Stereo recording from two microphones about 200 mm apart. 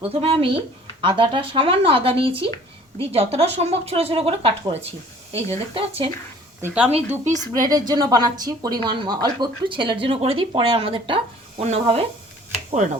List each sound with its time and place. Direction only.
0.0 s speech: 30° right (ahead or behind)
6.6 s speech: 10° right (ahead or behind)
7.3 s speech: 40° right (ahead or behind)
7.7 s speech: 20° right (ahead or behind)